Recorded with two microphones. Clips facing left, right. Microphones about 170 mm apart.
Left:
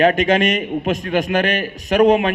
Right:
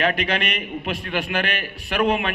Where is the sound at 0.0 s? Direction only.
45° left (ahead or behind).